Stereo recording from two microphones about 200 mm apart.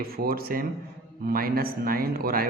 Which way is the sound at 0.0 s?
50° right (ahead or behind).